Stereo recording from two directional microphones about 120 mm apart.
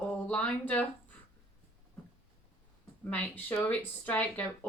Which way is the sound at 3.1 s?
15° left (ahead or behind).